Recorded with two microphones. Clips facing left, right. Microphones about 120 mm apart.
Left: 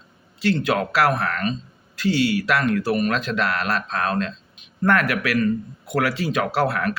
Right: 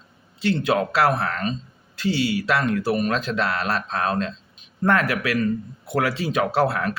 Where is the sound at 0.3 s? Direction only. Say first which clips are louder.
Even; 30° right (ahead or behind).